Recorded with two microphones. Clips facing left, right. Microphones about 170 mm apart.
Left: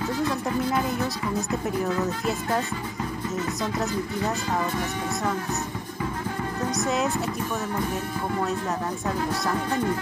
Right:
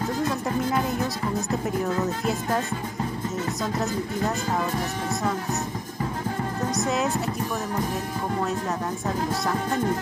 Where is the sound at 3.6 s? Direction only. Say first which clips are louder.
Right 1 dB; centre (ahead or behind).